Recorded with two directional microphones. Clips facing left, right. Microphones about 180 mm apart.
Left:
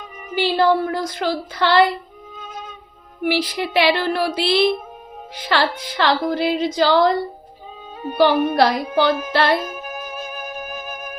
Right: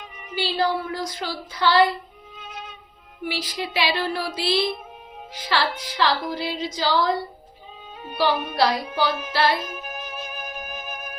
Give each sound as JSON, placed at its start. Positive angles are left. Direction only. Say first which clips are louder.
{"t": 0.0, "sound": "speech", "louder": "left 7 dB", "side_deg": 50}
{"t": 2.3, "sound": "music", "louder": "left 4 dB", "side_deg": 45}
{"t": 3.2, "sound": "speech", "louder": "left 8 dB", "side_deg": 65}
{"t": 8.0, "sound": "music", "louder": "left 7 dB", "side_deg": 45}
{"t": 10.0, "sound": "music", "louder": "left 4 dB", "side_deg": 45}